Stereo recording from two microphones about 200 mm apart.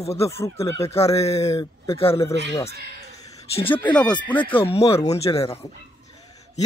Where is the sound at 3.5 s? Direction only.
25° left (ahead or behind).